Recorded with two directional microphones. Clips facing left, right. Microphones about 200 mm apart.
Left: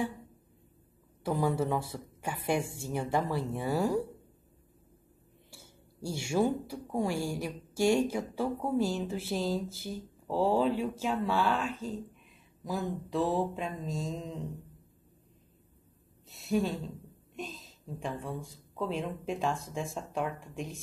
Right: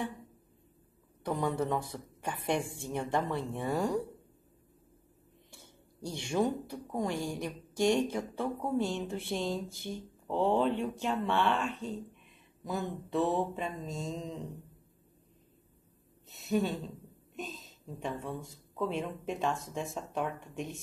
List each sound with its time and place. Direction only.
1.2 s speech: 5° left (ahead or behind)
5.5 s speech: 10° left (ahead or behind)
16.3 s speech: centre (ahead or behind)